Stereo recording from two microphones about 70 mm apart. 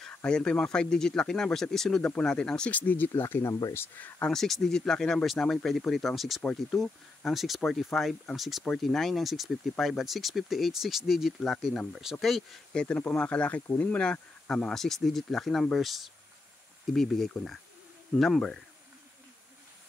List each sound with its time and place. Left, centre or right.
0.1 s speech: centre
2.7 s speech: left
4.2 s speech: centre
12.7 s speech: centre
14.5 s speech: centre